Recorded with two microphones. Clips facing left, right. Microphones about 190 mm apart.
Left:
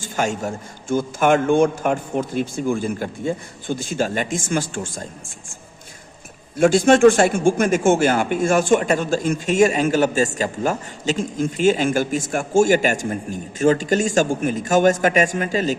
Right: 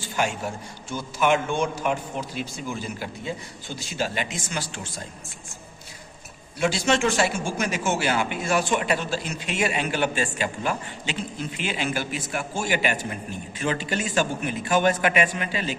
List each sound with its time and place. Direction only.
0.0 s speech: 45° left (ahead or behind)
6.6 s speech: 50° left (ahead or behind)